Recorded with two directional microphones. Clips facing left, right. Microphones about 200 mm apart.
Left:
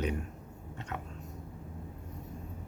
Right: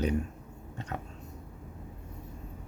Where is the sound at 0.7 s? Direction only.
35° right (ahead or behind).